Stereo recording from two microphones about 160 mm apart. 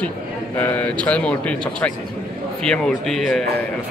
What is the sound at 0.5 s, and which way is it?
A man's voice, 10° left (ahead or behind).